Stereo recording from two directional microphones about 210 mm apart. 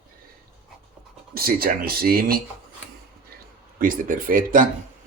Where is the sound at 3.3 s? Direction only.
45° right (ahead or behind).